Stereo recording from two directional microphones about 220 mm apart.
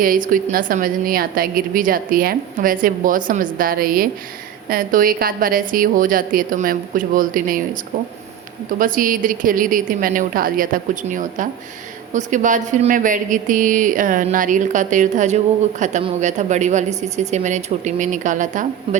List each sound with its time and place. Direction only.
0.0 s speech: 40° right (ahead or behind)
8.8 s speech: 40° right (ahead or behind)